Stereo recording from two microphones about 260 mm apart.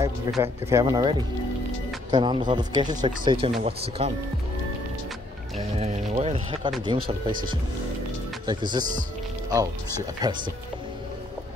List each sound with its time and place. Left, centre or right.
0.3 s speech: centre
5.8 s music: right
6.9 s speech: centre
8.5 s speech: centre
10.2 s speech: centre